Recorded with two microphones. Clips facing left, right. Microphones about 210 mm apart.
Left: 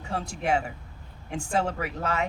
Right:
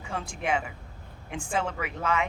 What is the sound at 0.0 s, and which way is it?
Speech, 40° left (ahead or behind).